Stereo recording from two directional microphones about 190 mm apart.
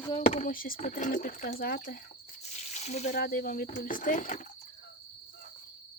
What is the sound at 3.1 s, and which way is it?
Speech, 50° left (ahead or behind).